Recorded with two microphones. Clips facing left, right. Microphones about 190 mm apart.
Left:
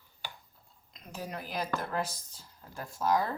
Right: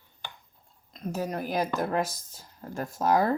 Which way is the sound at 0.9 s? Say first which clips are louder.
Right 9 dB; 45° right (ahead or behind).